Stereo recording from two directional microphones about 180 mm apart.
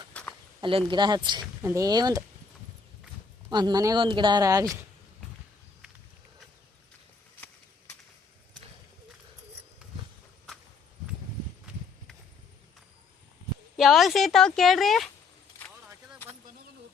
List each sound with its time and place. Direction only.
0.1 s a sound: 5° left (ahead or behind)
0.6 s speech: 30° right (ahead or behind)
3.5 s speech: 25° right (ahead or behind)
13.7 s speech: centre (ahead or behind)